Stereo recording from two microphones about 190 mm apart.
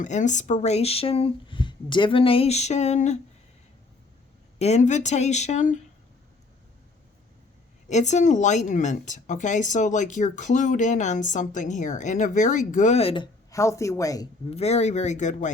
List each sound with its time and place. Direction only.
0.0 s speech: 40° left (ahead or behind)
4.5 s speech: 35° left (ahead or behind)
7.9 s speech: 35° left (ahead or behind)
13.5 s speech: 15° left (ahead or behind)
14.5 s speech: 35° left (ahead or behind)